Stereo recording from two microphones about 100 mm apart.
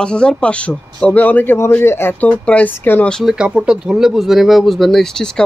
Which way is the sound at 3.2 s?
10° right (ahead or behind).